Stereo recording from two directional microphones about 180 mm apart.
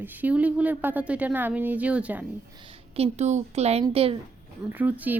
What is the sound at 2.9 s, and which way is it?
Speech, 35° right (ahead or behind).